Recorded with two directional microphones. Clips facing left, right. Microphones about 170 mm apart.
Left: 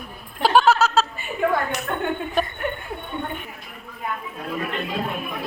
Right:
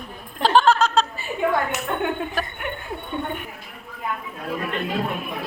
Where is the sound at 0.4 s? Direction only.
10° left (ahead or behind).